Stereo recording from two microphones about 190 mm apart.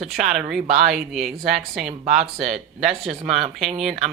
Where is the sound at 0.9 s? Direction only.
Centre (ahead or behind).